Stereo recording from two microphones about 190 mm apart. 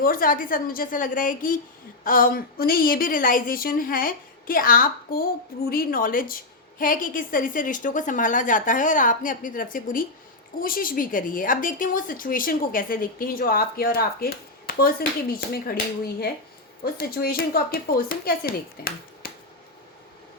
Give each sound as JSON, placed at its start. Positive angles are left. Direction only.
{"t": 0.0, "sound": "a woman's voice", "side_deg": 50}
{"t": 16.8, "sound": "a woman's voice", "side_deg": 50}